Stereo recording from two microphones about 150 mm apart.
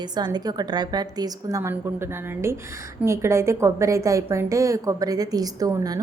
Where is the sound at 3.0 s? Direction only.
15° right (ahead or behind).